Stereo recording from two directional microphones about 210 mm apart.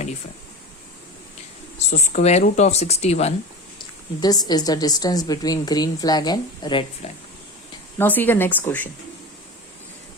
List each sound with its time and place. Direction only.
1.9 s speech: 35° left (ahead or behind)
3.8 s a woman's voice: 20° left (ahead or behind)
7.9 s speech: 10° left (ahead or behind)